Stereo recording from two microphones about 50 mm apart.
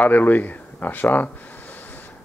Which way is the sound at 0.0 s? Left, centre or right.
Left.